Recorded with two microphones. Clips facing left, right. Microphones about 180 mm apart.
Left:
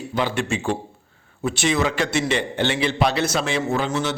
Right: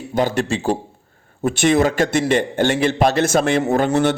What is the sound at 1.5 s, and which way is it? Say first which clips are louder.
A man's voice: right 6 dB; 50° right (ahead or behind).